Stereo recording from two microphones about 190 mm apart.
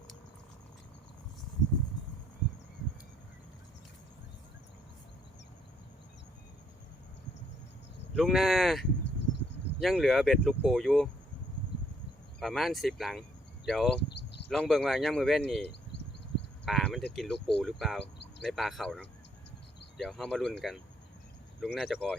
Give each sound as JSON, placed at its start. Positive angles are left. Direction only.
{"t": 8.1, "sound": "speech", "side_deg": 0}
{"t": 12.4, "sound": "speech", "side_deg": 0}
{"t": 14.1, "sound": "a sound", "side_deg": 60}
{"t": 14.5, "sound": "speech", "side_deg": 0}
{"t": 16.6, "sound": "cricket", "side_deg": 0}
{"t": 17.2, "sound": "speech", "side_deg": 0}